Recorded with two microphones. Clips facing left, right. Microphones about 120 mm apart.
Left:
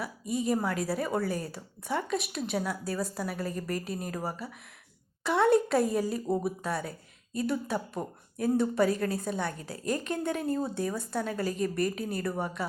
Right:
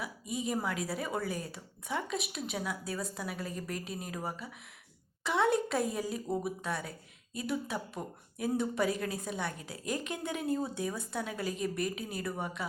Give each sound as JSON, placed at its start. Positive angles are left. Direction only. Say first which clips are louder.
{"t": 0.0, "sound": "a woman's voice", "louder": "left 5 dB", "side_deg": 0}